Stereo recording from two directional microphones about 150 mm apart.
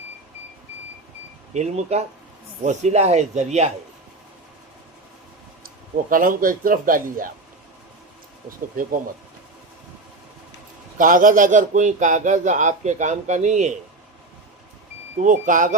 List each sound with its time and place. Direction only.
1.5 s speech: 45° right (ahead or behind)
5.6 s speech: 65° right (ahead or behind)
8.4 s a man's voice: 65° right (ahead or behind)
10.9 s a man's voice: 65° right (ahead or behind)
15.2 s a man's voice: 60° right (ahead or behind)